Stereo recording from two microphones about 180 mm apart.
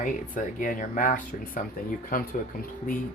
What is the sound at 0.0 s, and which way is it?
Speech, 45° left (ahead or behind).